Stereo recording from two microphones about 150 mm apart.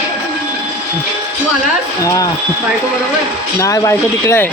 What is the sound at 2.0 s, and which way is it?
Speech, 25° left (ahead or behind).